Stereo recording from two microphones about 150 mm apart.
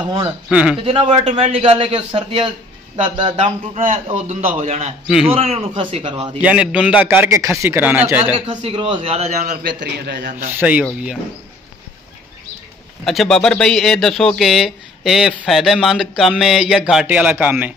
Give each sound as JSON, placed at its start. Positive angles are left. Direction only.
{"t": 0.5, "sound": "a man's voice", "side_deg": -5}
{"t": 0.8, "sound": "a man's voice", "side_deg": -40}
{"t": 3.3, "sound": "a man's voice", "side_deg": -45}
{"t": 5.0, "sound": "speech", "side_deg": -5}
{"t": 5.3, "sound": "a man's voice", "side_deg": -40}
{"t": 6.4, "sound": "a man's voice", "side_deg": -5}
{"t": 8.4, "sound": "a man's voice", "side_deg": -45}
{"t": 8.7, "sound": "a man's voice", "side_deg": -35}
{"t": 9.6, "sound": "a man's voice", "side_deg": -85}
{"t": 10.6, "sound": "a man's voice", "side_deg": -10}
{"t": 13.0, "sound": "speech", "side_deg": 0}